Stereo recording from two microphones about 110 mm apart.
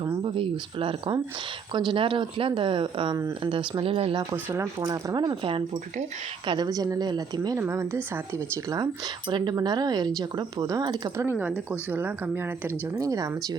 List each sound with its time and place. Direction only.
0.0 s speech: 45° right (ahead or behind); by 4.2 s 60° right (ahead or behind)
4.4 s speech: 25° right (ahead or behind); by 6.7 s 50° right (ahead or behind)
6.7 s speech: 35° right (ahead or behind)
7.6 s speech: 20° right (ahead or behind)
9.3 s speech: 45° right (ahead or behind)
11.2 s speech: 20° right (ahead or behind)
13.0 s speech: 30° right (ahead or behind)